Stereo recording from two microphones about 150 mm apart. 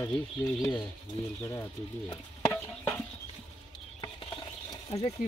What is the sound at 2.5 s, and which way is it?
Stir, 10° left (ahead or behind).